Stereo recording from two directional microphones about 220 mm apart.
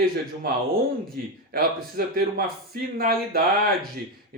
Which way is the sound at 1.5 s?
45° right (ahead or behind).